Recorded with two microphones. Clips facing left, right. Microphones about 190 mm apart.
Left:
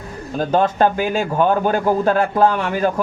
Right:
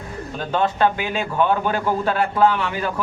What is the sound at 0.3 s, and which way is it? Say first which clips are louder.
Speech: left 5 dB; 40° left (ahead or behind).